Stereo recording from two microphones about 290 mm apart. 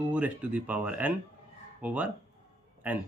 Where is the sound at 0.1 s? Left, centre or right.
Centre.